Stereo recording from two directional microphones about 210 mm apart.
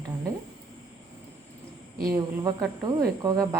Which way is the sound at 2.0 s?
15° right (ahead or behind).